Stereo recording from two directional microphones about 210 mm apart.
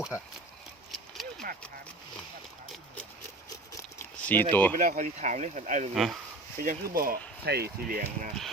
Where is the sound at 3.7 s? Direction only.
10° left (ahead or behind).